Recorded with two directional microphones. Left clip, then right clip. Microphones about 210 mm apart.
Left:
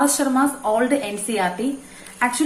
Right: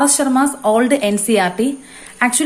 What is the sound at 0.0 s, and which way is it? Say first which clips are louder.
A woman's voice: right 4 dB; 45° right (ahead or behind).